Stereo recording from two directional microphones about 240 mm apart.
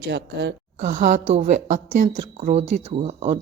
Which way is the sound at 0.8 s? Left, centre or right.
Right.